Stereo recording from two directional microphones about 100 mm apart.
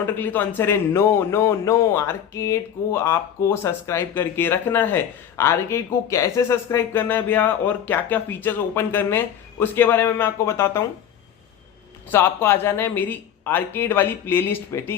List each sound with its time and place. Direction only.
0.0 s speech: 20° left (ahead or behind)
12.1 s speech: 25° left (ahead or behind)